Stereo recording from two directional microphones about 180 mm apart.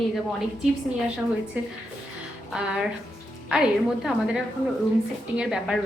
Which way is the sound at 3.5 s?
Centre (ahead or behind).